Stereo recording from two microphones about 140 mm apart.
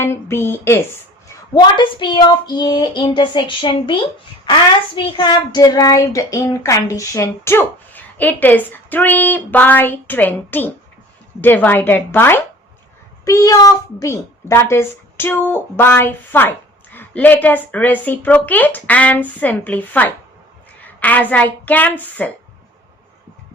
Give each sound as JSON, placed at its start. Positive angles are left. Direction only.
{"t": 0.0, "sound": "a woman's voice", "side_deg": 20}
{"t": 1.5, "sound": "a sound", "side_deg": 35}
{"t": 4.9, "sound": "a woman's voice", "side_deg": 35}